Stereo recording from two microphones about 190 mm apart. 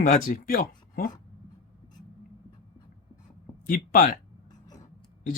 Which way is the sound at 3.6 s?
50° left (ahead or behind).